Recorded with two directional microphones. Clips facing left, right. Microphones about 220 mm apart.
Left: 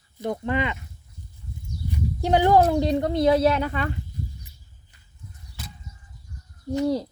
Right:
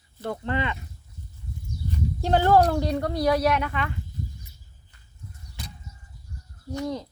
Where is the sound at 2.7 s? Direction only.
20° left (ahead or behind).